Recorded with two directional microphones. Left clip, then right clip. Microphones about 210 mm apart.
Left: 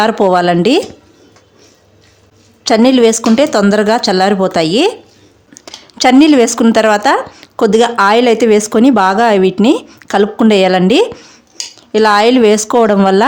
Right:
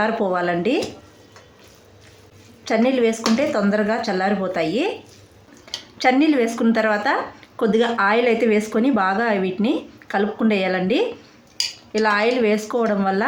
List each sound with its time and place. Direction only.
0.0 s speech: 55° left (ahead or behind)
2.6 s speech: 55° left (ahead or behind)